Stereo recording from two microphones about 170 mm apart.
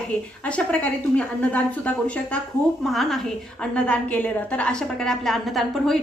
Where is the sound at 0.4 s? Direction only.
5° left (ahead or behind).